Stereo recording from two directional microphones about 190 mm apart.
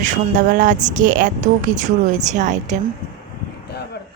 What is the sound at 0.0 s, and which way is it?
Speech, 45° right (ahead or behind).